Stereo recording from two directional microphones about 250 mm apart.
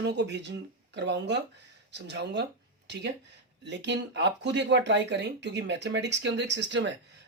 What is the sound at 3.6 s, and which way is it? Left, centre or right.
Speech, right.